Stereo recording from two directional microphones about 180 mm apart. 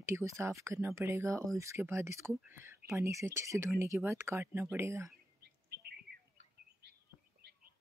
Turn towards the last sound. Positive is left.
turn(degrees=-60)  # may be behind; listen again after turning